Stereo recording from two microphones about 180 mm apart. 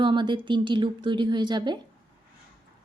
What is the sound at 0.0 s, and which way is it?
Speech, 25° right (ahead or behind).